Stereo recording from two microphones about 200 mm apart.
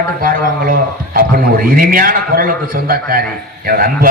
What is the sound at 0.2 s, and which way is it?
A man's voice, 45° right (ahead or behind).